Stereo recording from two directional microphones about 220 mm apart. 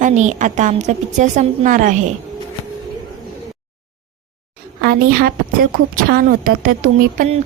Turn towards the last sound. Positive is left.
turn(degrees=-40)  # may be behind; listen again after turning